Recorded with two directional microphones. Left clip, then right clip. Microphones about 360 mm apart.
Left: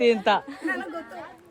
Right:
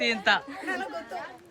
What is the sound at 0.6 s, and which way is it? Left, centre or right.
Speech, right.